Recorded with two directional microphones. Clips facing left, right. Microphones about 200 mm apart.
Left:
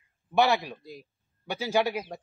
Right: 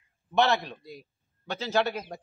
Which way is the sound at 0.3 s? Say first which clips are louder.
Left 1 dB; 10° left (ahead or behind).